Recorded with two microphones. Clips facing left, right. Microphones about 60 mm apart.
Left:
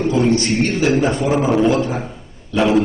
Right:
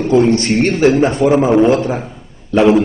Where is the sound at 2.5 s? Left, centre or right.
Right.